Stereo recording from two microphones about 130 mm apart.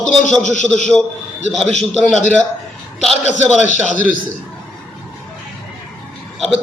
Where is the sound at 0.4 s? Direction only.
75° left (ahead or behind).